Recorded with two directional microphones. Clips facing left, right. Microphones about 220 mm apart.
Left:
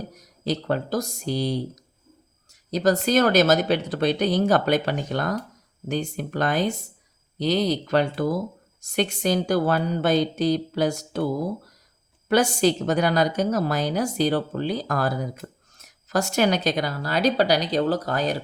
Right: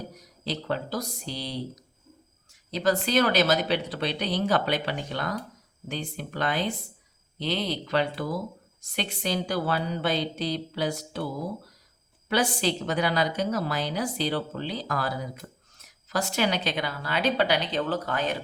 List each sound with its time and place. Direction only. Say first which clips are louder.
0.2 s a woman's voice: left 8 dB; 45° left (ahead or behind)
12.3 s a woman's voice: left 6 dB; 45° left (ahead or behind)